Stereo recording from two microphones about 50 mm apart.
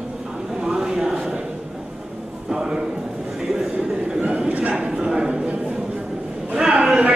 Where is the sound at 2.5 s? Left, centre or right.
Centre.